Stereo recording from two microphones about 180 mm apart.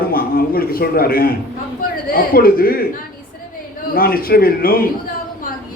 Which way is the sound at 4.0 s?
55° left (ahead or behind).